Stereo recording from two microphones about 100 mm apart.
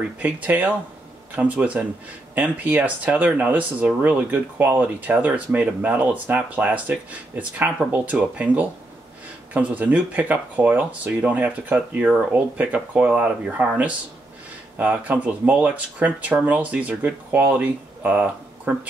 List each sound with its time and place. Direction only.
0.2 s speech: 15° right (ahead or behind)